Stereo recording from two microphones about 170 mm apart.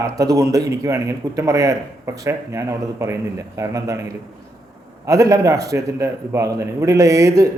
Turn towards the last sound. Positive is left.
turn(degrees=-20)  # may be behind; listen again after turning